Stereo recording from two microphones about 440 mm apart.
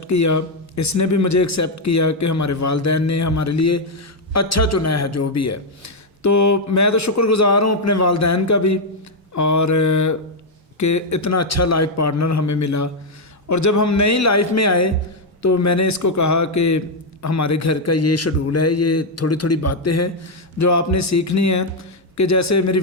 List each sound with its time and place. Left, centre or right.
0.1 s a man's voice: left